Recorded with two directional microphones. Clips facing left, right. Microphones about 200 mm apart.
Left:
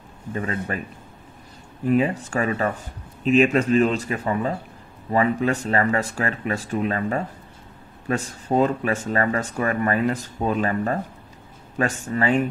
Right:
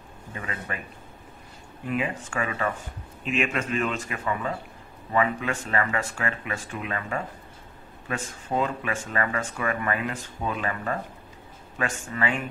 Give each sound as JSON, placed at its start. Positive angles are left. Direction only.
{"t": 0.3, "sound": "speech", "side_deg": 40}
{"t": 1.9, "sound": "speech", "side_deg": 35}